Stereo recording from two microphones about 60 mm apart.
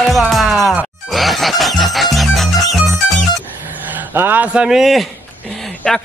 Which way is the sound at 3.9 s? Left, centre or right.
Right.